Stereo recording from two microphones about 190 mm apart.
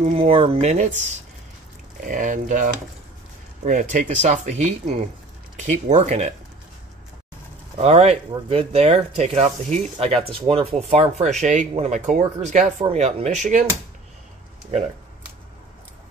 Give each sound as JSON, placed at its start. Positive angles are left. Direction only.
{"t": 0.0, "sound": "speech", "side_deg": -35}
{"t": 7.7, "sound": "speech", "side_deg": -35}